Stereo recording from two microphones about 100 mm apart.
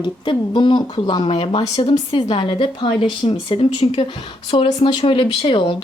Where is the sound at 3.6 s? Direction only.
70° left (ahead or behind).